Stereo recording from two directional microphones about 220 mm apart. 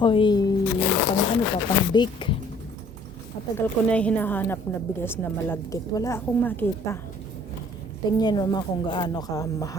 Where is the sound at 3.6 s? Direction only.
5° left (ahead or behind).